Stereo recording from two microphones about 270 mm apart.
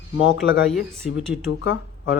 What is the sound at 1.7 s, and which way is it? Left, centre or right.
Speech, left.